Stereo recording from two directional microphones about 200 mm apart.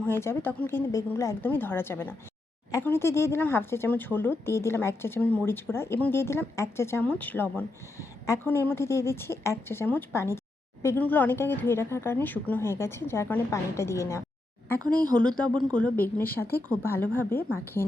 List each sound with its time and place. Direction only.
0.0 s speech: 10° left (ahead or behind)
15.1 s a woman's voice: 5° left (ahead or behind)